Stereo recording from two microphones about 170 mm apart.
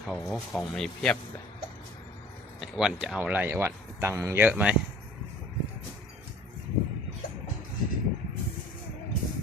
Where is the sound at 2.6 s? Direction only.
5° right (ahead or behind).